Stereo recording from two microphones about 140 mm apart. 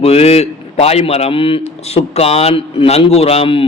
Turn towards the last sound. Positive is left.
turn(degrees=45)  # may be behind; listen again after turning